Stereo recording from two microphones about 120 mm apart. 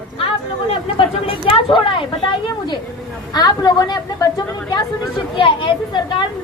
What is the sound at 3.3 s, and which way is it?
A woman's voice, 35° left (ahead or behind).